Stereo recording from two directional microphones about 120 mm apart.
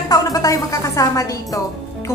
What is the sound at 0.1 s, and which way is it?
A woman's voice, 30° left (ahead or behind).